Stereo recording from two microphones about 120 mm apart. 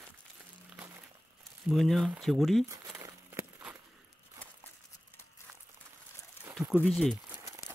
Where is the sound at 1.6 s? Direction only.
Centre (ahead or behind).